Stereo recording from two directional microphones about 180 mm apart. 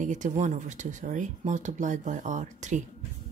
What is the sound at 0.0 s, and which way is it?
Speech, 45° right (ahead or behind).